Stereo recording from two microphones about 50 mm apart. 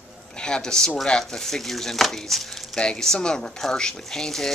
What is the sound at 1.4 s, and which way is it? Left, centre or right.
Speech, centre.